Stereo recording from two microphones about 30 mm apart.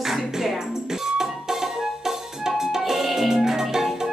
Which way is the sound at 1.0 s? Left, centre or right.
Centre.